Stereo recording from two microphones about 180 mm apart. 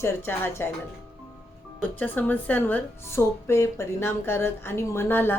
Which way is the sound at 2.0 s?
10° left (ahead or behind).